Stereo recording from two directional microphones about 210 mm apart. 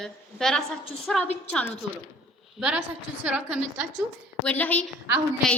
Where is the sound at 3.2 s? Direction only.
5° right (ahead or behind).